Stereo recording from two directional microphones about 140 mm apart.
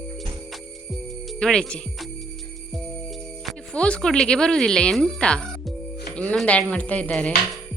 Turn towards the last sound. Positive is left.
turn(degrees=10)  # may be behind; listen again after turning